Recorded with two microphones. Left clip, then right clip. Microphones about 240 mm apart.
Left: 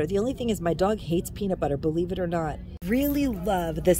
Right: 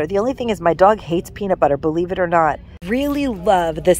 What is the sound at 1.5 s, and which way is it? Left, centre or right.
Speech, centre.